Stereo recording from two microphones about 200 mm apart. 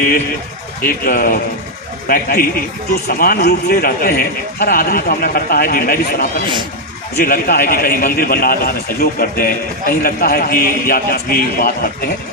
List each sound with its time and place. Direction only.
0.8 s a man's voice: 45° left (ahead or behind)
7.3 s a man's voice: 50° left (ahead or behind)